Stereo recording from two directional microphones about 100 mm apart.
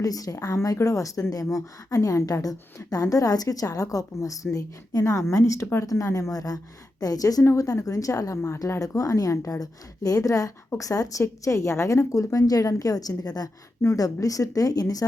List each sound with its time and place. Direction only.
0.0 s a woman's voice: 35° left (ahead or behind)